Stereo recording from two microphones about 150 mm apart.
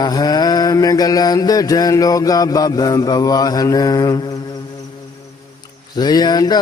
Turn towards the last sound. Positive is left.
turn(degrees=30)  # may be behind; listen again after turning